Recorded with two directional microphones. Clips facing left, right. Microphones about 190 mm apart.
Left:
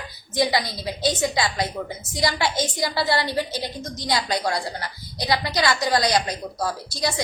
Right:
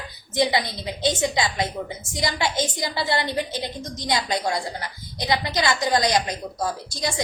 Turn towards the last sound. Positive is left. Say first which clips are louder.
# left 1 dB
turn(degrees=-20)  # may be behind; listen again after turning